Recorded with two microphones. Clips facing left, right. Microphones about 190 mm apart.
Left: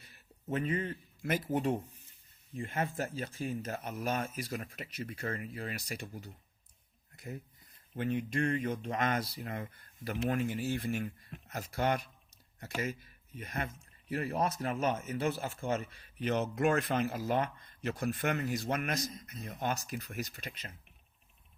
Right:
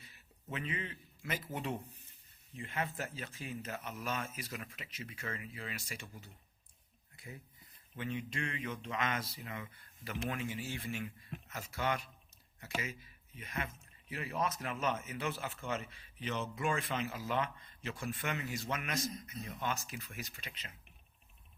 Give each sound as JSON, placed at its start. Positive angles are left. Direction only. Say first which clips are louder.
{"t": 0.5, "sound": "speech", "louder": "left 8 dB", "side_deg": 45}
{"t": 14.3, "sound": "speech", "louder": "left 2 dB", "side_deg": 35}
{"t": 16.6, "sound": "speech", "louder": "left 6 dB", "side_deg": 55}